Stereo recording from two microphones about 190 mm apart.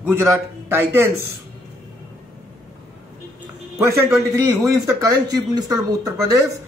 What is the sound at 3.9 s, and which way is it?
A man's voice, 15° right (ahead or behind).